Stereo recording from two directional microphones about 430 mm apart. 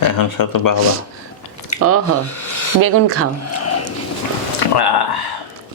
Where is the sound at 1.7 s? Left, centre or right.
Left.